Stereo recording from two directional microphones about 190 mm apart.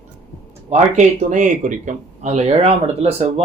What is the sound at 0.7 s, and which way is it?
Speech, 40° right (ahead or behind).